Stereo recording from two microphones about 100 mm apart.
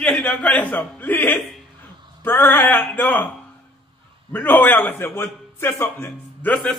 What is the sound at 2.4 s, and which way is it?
Speech, 20° left (ahead or behind).